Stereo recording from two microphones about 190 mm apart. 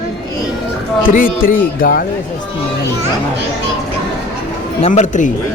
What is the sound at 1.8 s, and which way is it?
Speech, 50° left (ahead or behind).